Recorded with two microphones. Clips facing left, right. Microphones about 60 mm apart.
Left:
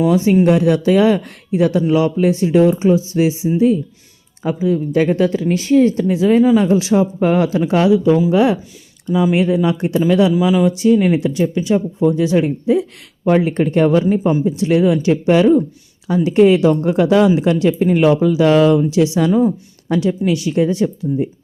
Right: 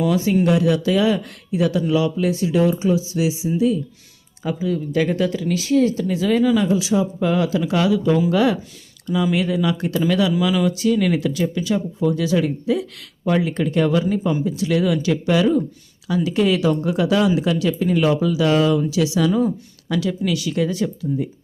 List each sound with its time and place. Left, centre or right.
0.4 s speech: left
6.7 s speech: left